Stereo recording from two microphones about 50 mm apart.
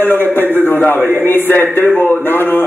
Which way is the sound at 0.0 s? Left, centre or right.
Left.